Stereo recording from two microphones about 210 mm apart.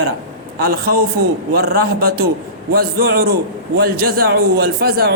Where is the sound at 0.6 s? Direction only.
45° right (ahead or behind).